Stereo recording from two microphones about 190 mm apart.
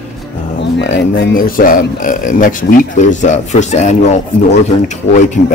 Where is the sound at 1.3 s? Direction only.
50° left (ahead or behind).